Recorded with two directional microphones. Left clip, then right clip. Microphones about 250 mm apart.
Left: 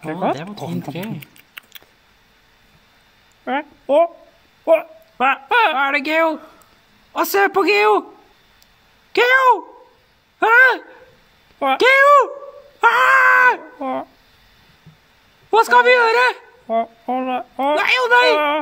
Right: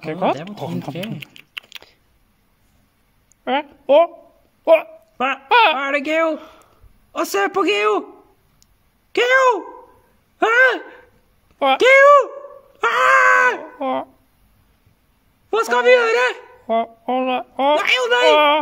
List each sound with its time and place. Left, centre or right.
0.0 s speech: centre
1.2 s typing: centre
3.4 s speech: centre
5.1 s speech: centre
5.5 s a sound: centre
5.8 s a man's voice: centre
9.1 s a man's voice: centre
11.8 s a man's voice: centre
12.8 s groan: centre
13.7 s speech: centre
15.5 s a man's voice: centre
16.6 s speech: centre
17.7 s a man's voice: centre